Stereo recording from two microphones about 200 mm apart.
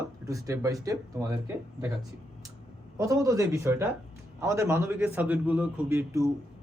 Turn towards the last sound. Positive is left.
turn(degrees=-15)  # may be behind; listen again after turning